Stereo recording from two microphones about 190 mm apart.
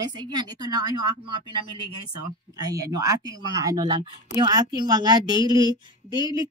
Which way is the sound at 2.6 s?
20° right (ahead or behind).